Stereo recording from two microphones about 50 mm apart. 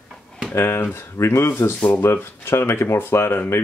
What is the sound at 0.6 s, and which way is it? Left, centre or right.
Speech, left.